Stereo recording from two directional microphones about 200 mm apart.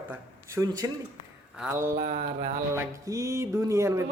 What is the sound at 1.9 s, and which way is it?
Mantra, 35° right (ahead or behind).